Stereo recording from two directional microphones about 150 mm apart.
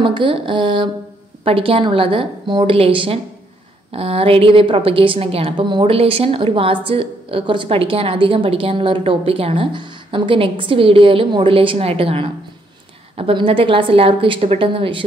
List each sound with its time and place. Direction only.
0.0 s a woman's voice: 35° right (ahead or behind)